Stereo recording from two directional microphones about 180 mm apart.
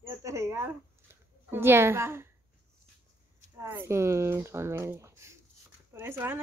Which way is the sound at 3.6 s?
15° right (ahead or behind).